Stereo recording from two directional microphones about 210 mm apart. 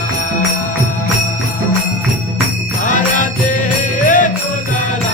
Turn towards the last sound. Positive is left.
turn(degrees=40)  # may be behind; listen again after turning